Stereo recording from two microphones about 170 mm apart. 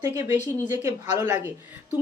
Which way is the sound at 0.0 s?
15° right (ahead or behind).